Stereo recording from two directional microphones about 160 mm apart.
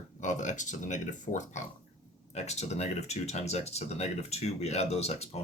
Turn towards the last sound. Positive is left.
turn(degrees=40)  # may be behind; listen again after turning